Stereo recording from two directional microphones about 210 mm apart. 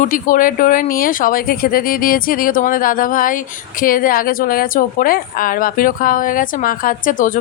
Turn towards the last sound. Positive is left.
turn(degrees=40)  # may be behind; listen again after turning